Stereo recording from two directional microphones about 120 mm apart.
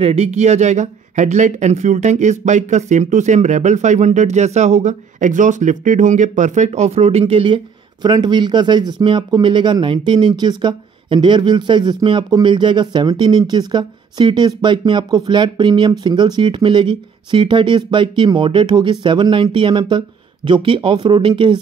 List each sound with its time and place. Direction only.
0.0 s speech: 60° right (ahead or behind)